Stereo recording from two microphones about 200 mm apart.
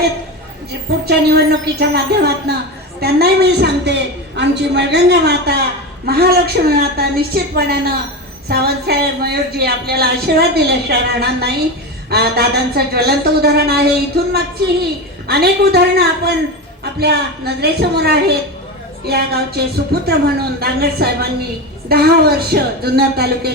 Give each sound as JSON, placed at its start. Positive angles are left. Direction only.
{"t": 1.0, "sound": "a woman's voice", "side_deg": -55}
{"t": 15.3, "sound": "speech", "side_deg": -55}